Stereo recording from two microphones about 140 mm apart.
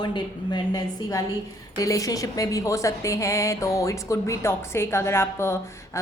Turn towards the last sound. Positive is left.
turn(degrees=20)  # may be behind; listen again after turning